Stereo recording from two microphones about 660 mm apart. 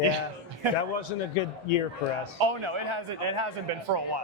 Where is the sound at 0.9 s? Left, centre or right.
Left.